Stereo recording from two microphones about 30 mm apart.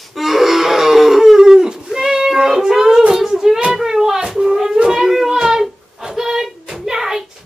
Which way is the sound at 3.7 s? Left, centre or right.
Centre.